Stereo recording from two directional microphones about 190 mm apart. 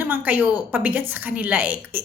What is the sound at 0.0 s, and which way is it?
A woman's voice, 10° right (ahead or behind).